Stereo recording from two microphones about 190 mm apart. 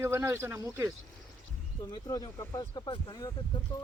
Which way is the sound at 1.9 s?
20° left (ahead or behind).